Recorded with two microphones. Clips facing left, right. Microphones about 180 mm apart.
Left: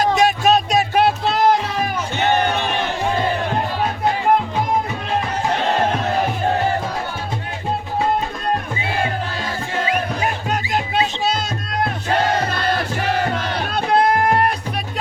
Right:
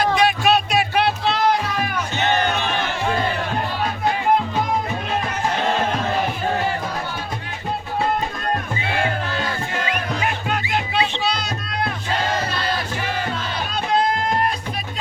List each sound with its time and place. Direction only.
0.0 s a sound: 45° left (ahead or behind)
2.3 s music: 15° left (ahead or behind)
9.7 s music: 30° left (ahead or behind); by 14.5 s 65° left (ahead or behind)